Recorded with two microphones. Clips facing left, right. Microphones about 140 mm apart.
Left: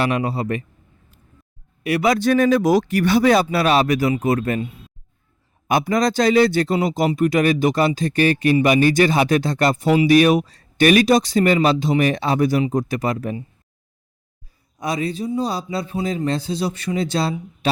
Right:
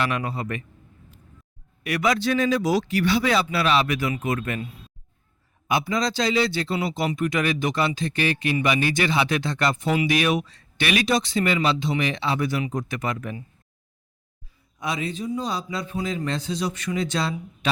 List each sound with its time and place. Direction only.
0.0 s speech: 30° left (ahead or behind)
1.8 s speech: 30° left (ahead or behind)
2.1 s speech: 50° left (ahead or behind); by 4.9 s 25° left (ahead or behind)
5.6 s speech: 45° left (ahead or behind)
14.8 s speech: 40° left (ahead or behind)